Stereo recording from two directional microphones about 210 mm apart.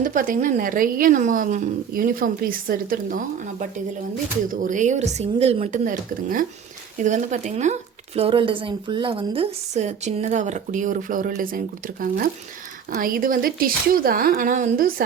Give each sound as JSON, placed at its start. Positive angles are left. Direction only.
{"t": 0.0, "sound": "a woman's voice", "side_deg": -40}